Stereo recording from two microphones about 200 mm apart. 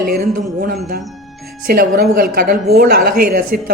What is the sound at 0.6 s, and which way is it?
A woman's voice, 50° right (ahead or behind).